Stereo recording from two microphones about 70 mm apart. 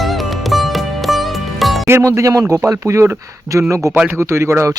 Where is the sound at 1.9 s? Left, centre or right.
Right.